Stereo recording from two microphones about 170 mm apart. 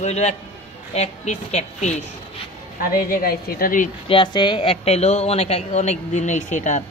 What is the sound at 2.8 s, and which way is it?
A woman's voice, 60° left (ahead or behind).